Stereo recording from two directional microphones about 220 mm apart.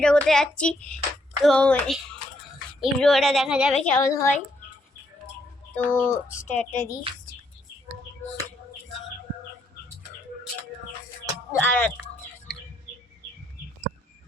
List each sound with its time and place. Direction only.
0.0 s speech: 5° left (ahead or behind)
3.8 s a woman's voice: 10° left (ahead or behind)
5.7 s a woman's voice: 10° left (ahead or behind)
11.5 s a woman's voice: 10° left (ahead or behind)